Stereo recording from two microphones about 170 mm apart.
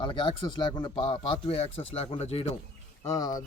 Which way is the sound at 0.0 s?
30° left (ahead or behind).